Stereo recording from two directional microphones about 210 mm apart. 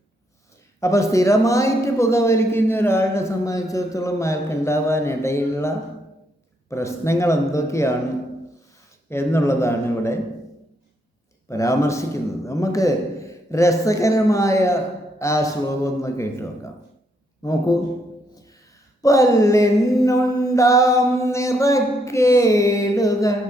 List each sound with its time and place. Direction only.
0.8 s a man's voice: 15° left (ahead or behind)
9.0 s a man's voice: 10° left (ahead or behind)
11.4 s a man's voice: 15° left (ahead or behind)
19.0 s a man's voice: 15° left (ahead or behind)